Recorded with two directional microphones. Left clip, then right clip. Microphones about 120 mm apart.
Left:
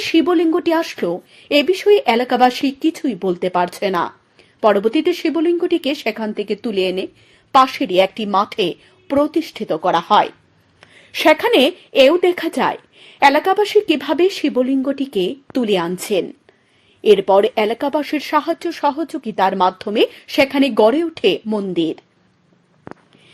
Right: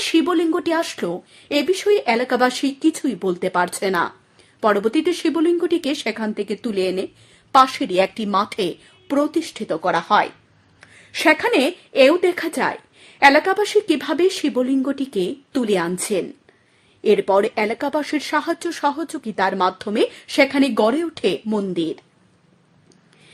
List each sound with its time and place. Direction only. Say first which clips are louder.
0.0 s a woman's voice: left 3 dB; 15° left (ahead or behind)